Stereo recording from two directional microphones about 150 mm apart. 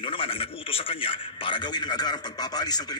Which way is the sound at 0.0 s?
35° left (ahead or behind).